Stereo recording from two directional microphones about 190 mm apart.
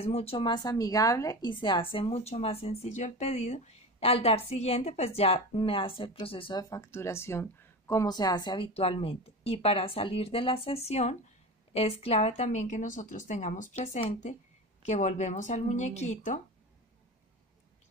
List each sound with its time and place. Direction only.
0.0 s a woman's voice: 30° left (ahead or behind)